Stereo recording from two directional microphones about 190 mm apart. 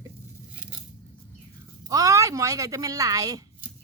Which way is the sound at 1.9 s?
15° right (ahead or behind).